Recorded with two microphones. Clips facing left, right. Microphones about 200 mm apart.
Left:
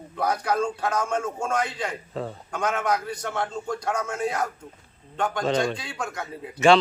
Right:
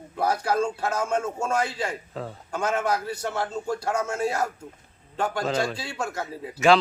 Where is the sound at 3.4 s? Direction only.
25° right (ahead or behind).